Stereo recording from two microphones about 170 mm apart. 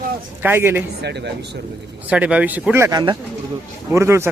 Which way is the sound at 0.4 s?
15° right (ahead or behind).